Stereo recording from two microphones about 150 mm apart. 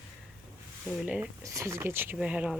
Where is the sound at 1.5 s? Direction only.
20° right (ahead or behind).